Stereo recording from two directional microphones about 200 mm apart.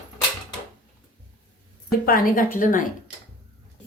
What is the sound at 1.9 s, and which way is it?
Speech, 45° left (ahead or behind).